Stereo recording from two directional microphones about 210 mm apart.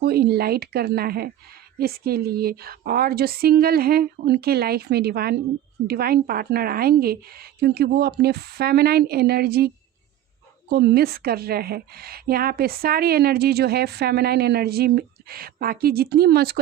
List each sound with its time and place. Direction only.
0.0 s a woman's voice: 50° right (ahead or behind)